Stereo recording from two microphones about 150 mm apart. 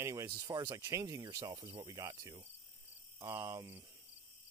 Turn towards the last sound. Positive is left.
turn(degrees=-20)  # may be behind; listen again after turning